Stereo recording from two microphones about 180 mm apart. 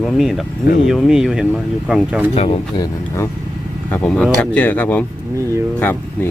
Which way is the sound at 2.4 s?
25° left (ahead or behind).